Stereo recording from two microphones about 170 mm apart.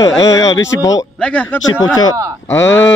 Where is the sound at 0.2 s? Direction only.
20° left (ahead or behind).